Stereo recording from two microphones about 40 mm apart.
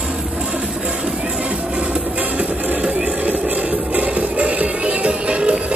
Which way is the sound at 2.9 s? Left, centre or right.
Right.